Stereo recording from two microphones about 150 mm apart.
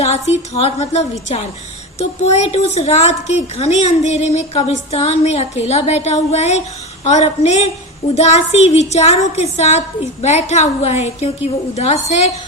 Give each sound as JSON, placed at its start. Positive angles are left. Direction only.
{"t": 0.0, "sound": "a woman's voice", "side_deg": 45}